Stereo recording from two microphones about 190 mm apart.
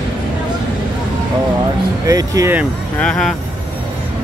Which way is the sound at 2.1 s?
15° right (ahead or behind).